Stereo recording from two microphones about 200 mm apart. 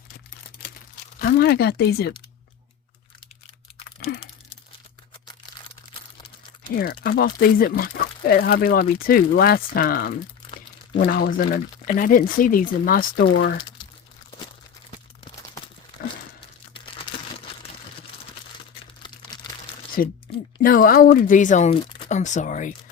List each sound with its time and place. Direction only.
1.2 s speech: 50° left (ahead or behind)
6.7 s speech: 45° left (ahead or behind)
13.3 s speech: 60° left (ahead or behind)
14.8 s a sound: 25° left (ahead or behind)
16.0 s a sound: 50° left (ahead or behind)
19.0 s crumpling: 20° left (ahead or behind)
20.0 s speech: 45° left (ahead or behind)